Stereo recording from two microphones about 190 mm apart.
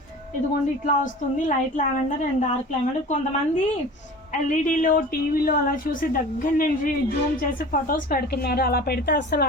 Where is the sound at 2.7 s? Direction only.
40° left (ahead or behind).